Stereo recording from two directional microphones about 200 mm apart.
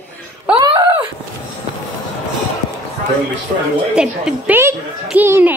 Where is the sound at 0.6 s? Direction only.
20° right (ahead or behind).